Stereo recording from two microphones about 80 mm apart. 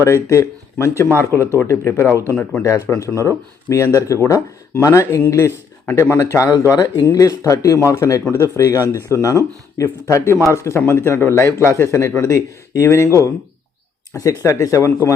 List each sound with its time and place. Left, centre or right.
0.0 s a man's voice: left
2.3 s speech: centre
2.6 s a man's voice: left